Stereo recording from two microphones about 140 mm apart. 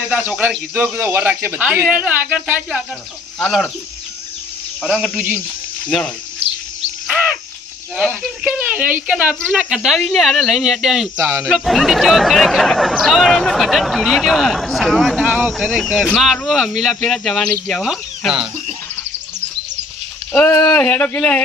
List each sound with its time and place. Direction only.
0.1 s speech: 10° right (ahead or behind)
4.8 s speech: 5° right (ahead or behind)
6.4 s bird: 45° right (ahead or behind)
7.9 s speech: centre (ahead or behind)
8.5 s speech: 10° right (ahead or behind)
15.3 s speech: 10° right (ahead or behind)
15.5 s speech: centre (ahead or behind)
20.3 s speech: 15° left (ahead or behind)